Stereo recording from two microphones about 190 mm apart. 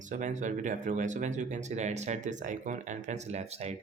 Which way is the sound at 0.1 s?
40° right (ahead or behind).